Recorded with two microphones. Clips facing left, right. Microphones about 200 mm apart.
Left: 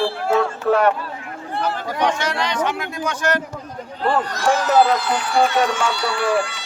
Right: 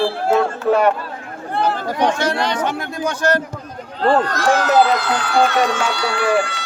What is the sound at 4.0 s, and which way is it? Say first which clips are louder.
Speech: right 5 dB; 75° right (ahead or behind).